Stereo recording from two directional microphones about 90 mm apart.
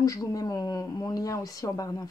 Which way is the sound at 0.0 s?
40° left (ahead or behind).